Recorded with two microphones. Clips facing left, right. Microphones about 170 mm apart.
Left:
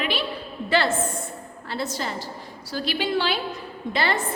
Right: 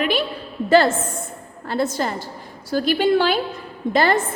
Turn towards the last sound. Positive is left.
turn(degrees=-45)  # may be behind; listen again after turning